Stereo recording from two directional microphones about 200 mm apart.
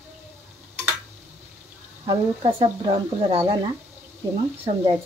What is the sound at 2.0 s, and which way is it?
Speech, 25° right (ahead or behind).